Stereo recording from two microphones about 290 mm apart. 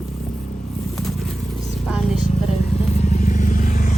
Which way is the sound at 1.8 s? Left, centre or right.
Centre.